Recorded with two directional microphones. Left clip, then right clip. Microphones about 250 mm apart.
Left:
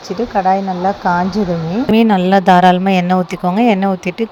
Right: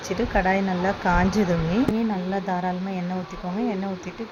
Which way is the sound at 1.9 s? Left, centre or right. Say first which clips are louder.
Left 15 dB; left.